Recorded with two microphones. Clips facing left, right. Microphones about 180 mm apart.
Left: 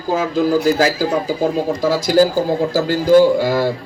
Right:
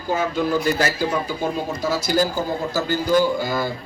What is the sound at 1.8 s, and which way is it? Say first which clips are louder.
Speech: left 4 dB; 90° left.